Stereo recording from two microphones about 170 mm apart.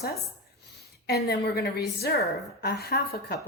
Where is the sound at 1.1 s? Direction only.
70° left (ahead or behind).